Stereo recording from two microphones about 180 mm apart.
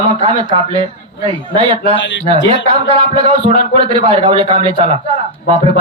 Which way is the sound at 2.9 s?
30° right (ahead or behind).